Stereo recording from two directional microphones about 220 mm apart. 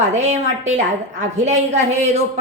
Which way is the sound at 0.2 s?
30° right (ahead or behind).